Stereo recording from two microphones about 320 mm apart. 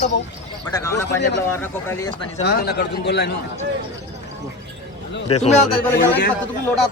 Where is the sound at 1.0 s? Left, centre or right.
Left.